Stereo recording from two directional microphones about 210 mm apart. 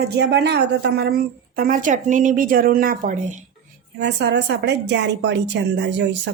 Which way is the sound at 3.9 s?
50° right (ahead or behind).